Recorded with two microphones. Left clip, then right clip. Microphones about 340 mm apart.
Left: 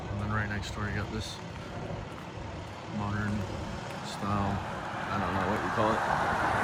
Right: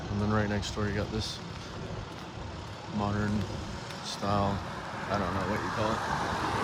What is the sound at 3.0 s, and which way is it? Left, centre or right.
Speech, left.